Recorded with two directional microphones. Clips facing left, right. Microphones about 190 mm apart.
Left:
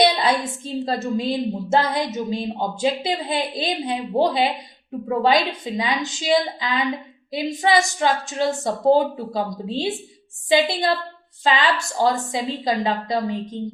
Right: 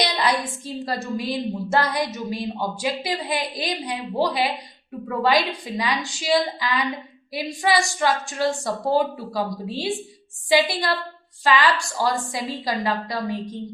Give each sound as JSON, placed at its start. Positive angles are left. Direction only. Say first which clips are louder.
{"t": 0.0, "sound": "a woman's voice", "louder": "left 4 dB", "side_deg": 25}